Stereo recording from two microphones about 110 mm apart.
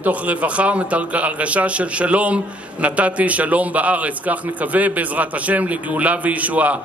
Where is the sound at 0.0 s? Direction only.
15° right (ahead or behind).